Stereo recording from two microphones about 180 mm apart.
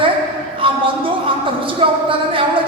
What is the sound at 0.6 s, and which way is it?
Speech, 30° right (ahead or behind).